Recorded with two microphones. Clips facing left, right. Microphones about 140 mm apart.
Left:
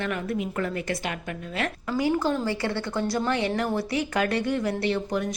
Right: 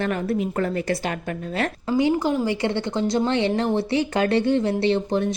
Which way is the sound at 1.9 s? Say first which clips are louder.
Right 4 dB; 20° right (ahead or behind).